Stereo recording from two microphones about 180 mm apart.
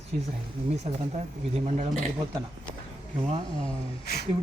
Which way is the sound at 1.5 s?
40° right (ahead or behind).